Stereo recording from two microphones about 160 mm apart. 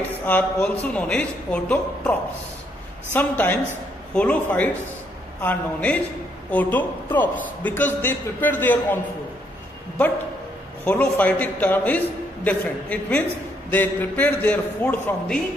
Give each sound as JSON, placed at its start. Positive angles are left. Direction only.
{"t": 0.2, "sound": "a man's voice", "side_deg": 10}
{"t": 10.9, "sound": "a man's voice", "side_deg": 10}